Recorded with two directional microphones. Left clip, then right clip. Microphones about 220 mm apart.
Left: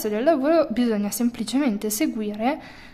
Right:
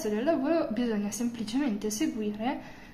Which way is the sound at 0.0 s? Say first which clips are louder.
Left 8 dB; 50° left (ahead or behind).